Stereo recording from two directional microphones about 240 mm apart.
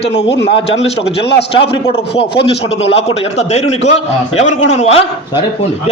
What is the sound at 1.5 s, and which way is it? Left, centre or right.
A man's voice, left.